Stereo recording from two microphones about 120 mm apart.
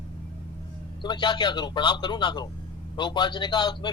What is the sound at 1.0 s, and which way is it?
Speech, 40° left (ahead or behind).